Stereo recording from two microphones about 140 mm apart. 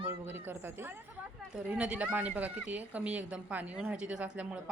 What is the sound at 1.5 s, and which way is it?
Speech, 10° right (ahead or behind).